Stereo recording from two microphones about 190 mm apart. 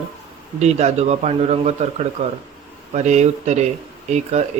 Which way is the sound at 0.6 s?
35° right (ahead or behind).